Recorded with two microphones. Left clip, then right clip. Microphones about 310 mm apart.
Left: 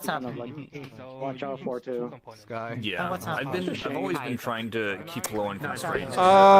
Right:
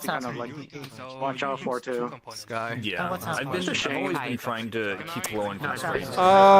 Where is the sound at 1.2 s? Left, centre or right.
Right.